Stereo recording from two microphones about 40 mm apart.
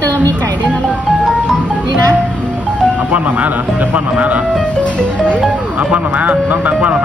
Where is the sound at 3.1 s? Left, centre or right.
Right.